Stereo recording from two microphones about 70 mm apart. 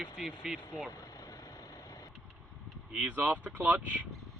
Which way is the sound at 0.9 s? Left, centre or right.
Left.